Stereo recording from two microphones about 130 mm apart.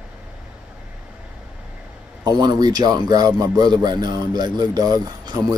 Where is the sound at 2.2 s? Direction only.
35° right (ahead or behind).